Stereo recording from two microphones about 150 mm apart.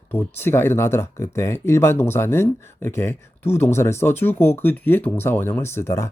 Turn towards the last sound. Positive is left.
turn(degrees=20)  # may be behind; listen again after turning